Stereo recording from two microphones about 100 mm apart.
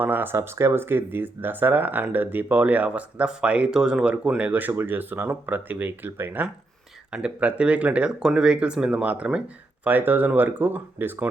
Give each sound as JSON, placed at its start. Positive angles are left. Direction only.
{"t": 0.0, "sound": "speech", "side_deg": -20}
{"t": 7.1, "sound": "speech", "side_deg": -10}